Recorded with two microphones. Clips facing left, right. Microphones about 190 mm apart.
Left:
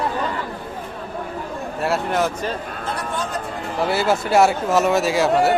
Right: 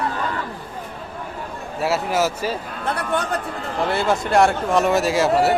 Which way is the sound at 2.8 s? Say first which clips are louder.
Right 5 dB; 60° right (ahead or behind).